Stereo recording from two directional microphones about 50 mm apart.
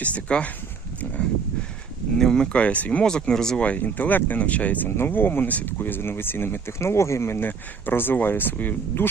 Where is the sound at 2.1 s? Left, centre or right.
Centre.